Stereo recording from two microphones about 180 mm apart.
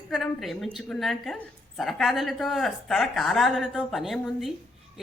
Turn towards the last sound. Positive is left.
turn(degrees=0)  # may be behind; listen again after turning